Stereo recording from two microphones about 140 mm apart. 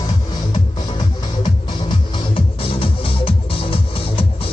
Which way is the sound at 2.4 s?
40° left (ahead or behind).